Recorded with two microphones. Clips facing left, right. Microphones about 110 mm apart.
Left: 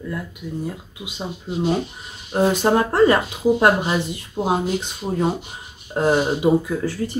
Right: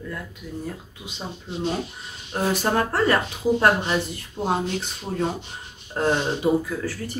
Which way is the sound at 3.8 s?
10° left (ahead or behind).